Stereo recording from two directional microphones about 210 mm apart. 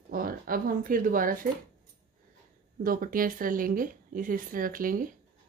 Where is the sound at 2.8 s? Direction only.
40° right (ahead or behind).